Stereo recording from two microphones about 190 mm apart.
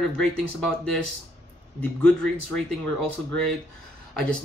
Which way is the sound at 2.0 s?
5° left (ahead or behind).